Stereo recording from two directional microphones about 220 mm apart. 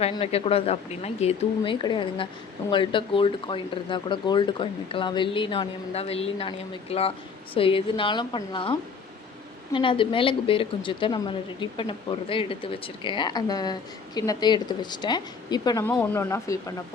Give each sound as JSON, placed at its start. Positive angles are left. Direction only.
{"t": 0.0, "sound": "speech", "side_deg": 25}